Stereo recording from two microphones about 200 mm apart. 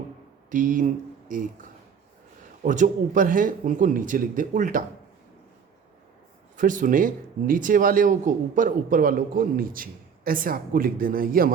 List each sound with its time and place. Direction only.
0.5 s speech: 40° right (ahead or behind)
2.6 s speech: 40° right (ahead or behind)
6.6 s speech: 40° right (ahead or behind)